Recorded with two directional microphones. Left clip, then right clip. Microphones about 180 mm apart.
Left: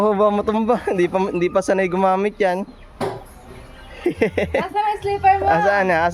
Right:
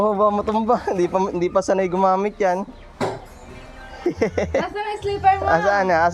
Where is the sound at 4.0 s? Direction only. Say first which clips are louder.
Left 2 dB; 25° left (ahead or behind).